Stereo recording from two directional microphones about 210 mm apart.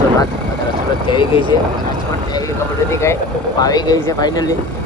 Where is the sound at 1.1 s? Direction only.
25° left (ahead or behind).